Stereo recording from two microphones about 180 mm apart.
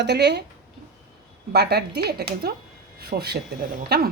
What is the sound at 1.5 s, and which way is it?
Speech, 60° right (ahead or behind).